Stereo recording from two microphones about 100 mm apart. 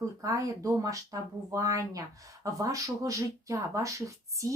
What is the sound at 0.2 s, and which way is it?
Speech, 35° right (ahead or behind).